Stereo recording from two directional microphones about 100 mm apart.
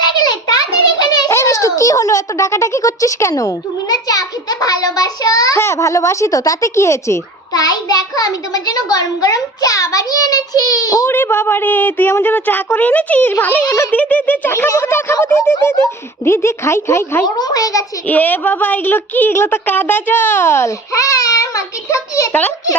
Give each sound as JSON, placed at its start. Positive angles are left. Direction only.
{"t": 0.1, "sound": "a sound", "side_deg": 45}
{"t": 1.3, "sound": "a child's voice", "side_deg": 30}
{"t": 11.1, "sound": "speech", "side_deg": 20}
{"t": 17.2, "sound": "a child's voice", "side_deg": 40}
{"t": 18.1, "sound": "speech", "side_deg": 15}
{"t": 22.3, "sound": "a child's voice", "side_deg": 15}